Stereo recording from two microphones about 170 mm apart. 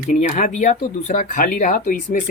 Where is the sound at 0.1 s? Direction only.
50° left (ahead or behind).